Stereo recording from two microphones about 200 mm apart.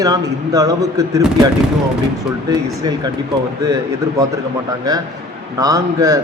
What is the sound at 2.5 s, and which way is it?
A man's voice, 20° right (ahead or behind).